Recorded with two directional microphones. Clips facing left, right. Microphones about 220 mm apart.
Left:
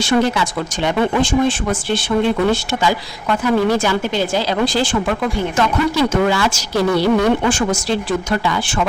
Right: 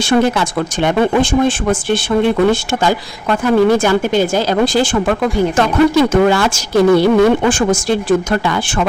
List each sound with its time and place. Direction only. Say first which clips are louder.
0.1 s speech: right 3 dB; 55° right (ahead or behind)